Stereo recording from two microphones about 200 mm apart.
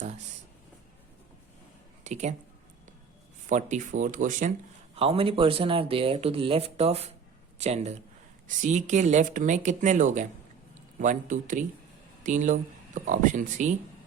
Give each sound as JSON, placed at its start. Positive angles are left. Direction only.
{"t": 2.0, "sound": "speech", "side_deg": -35}
{"t": 3.5, "sound": "speech", "side_deg": -35}
{"t": 4.9, "sound": "speech", "side_deg": -30}